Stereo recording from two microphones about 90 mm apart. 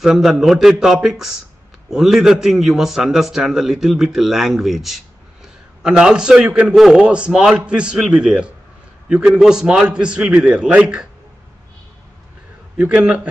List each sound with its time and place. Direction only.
0.0 s a man's voice: 5° right (ahead or behind)
12.7 s a man's voice: 15° right (ahead or behind)